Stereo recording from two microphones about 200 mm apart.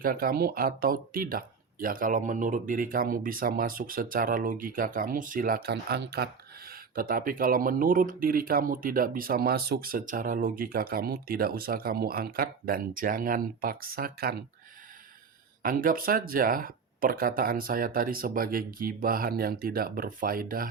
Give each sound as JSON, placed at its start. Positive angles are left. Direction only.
{"t": 0.0, "sound": "speech", "side_deg": -45}
{"t": 15.6, "sound": "speech", "side_deg": -45}